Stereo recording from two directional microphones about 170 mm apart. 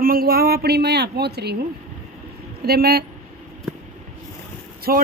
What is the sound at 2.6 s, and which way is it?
Speech, 65° right (ahead or behind).